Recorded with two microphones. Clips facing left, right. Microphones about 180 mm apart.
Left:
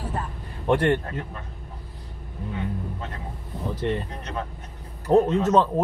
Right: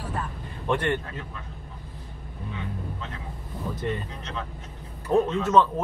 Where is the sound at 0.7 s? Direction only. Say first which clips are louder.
Left 5 dB; 35° left (ahead or behind).